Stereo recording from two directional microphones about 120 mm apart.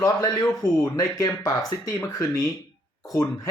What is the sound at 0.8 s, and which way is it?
Speech, 30° left (ahead or behind).